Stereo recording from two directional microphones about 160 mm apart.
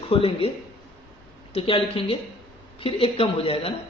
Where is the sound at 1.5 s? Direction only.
35° left (ahead or behind).